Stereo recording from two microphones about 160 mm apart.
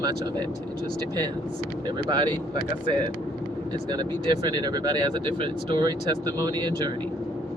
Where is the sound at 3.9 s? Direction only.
25° right (ahead or behind).